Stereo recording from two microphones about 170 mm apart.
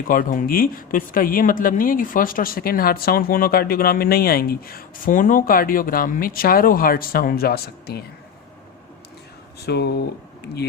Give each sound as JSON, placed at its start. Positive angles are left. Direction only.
{"t": 0.1, "sound": "speech", "side_deg": 55}
{"t": 9.6, "sound": "speech", "side_deg": 75}